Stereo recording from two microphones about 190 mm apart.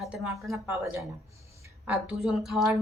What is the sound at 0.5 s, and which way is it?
A woman's voice, 15° right (ahead or behind).